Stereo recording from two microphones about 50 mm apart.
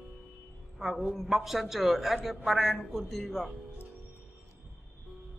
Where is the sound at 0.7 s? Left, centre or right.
Centre.